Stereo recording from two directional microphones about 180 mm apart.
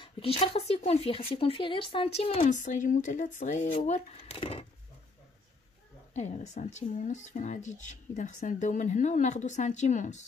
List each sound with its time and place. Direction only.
0.0 s speech: 30° left (ahead or behind)
6.1 s speech: 40° left (ahead or behind)